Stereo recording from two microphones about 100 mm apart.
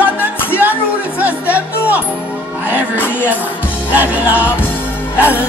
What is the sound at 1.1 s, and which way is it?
Music, 15° right (ahead or behind).